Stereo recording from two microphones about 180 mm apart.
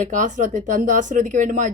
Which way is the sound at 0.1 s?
45° right (ahead or behind).